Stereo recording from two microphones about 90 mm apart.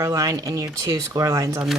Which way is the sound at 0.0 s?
40° right (ahead or behind).